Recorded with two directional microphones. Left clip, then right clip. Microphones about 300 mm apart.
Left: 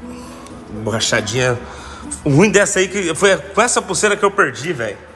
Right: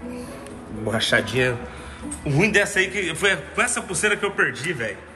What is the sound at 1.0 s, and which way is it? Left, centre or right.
A man's voice, left.